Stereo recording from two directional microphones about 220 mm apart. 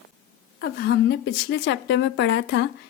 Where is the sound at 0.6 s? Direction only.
45° left (ahead or behind).